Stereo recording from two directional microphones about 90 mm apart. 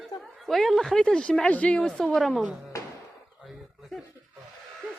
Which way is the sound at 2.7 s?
35° left (ahead or behind).